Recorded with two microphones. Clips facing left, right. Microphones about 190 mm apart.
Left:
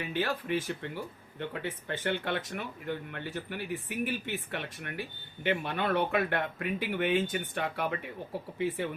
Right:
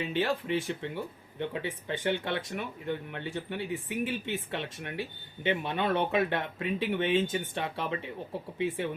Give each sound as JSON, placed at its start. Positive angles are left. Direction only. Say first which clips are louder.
{"t": 0.0, "sound": "speech", "louder": "right 3 dB", "side_deg": -20}